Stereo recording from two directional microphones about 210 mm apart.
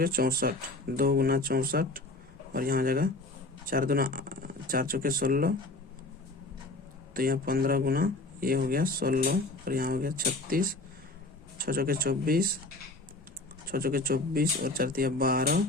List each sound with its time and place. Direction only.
0.0 s speech: 45° right (ahead or behind)
7.1 s speech: 45° right (ahead or behind)
13.7 s speech: 45° right (ahead or behind)